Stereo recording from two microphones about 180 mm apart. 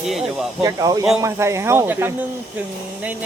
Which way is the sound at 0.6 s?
20° right (ahead or behind).